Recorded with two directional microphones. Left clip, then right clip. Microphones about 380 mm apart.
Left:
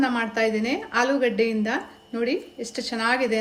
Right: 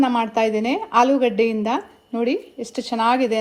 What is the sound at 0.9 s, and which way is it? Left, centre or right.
Speech, centre.